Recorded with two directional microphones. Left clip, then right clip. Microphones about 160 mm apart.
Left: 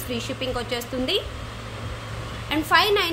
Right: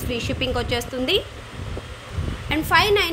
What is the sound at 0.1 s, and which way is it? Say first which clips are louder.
A woman's voice: right 3 dB; 25° right (ahead or behind).